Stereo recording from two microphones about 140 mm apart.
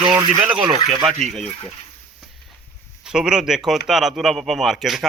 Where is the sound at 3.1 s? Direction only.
5° right (ahead or behind).